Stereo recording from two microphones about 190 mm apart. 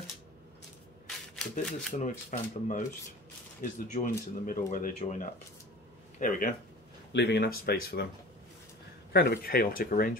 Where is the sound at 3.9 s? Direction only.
45° left (ahead or behind).